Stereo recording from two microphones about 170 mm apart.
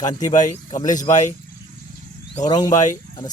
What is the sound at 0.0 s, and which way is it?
Speech, 20° left (ahead or behind).